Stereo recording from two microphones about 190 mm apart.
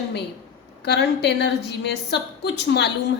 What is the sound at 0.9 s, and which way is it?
A woman's voice, 60° left (ahead or behind).